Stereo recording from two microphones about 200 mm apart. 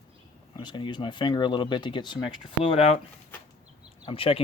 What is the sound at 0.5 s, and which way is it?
Speech, 25° left (ahead or behind).